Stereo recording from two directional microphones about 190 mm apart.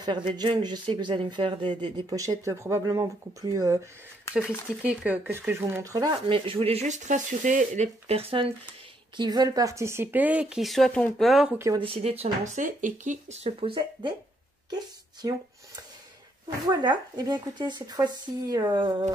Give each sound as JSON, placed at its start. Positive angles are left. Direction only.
{"t": 0.0, "sound": "speech", "side_deg": -25}
{"t": 4.4, "sound": "speech", "side_deg": -5}
{"t": 11.5, "sound": "speech", "side_deg": -15}
{"t": 11.8, "sound": "speech", "side_deg": -30}
{"t": 15.2, "sound": "speech", "side_deg": -20}
{"t": 16.4, "sound": "speech", "side_deg": -20}